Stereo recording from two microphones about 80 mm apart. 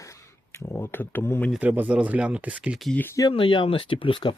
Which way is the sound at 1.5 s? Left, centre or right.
Right.